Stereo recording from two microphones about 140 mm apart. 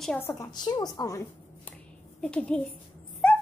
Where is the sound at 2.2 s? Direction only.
5° left (ahead or behind).